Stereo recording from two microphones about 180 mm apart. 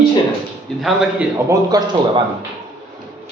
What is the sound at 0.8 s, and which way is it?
Speech, centre (ahead or behind).